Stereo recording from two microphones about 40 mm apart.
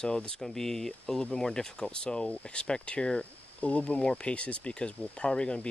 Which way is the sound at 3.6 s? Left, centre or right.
Left.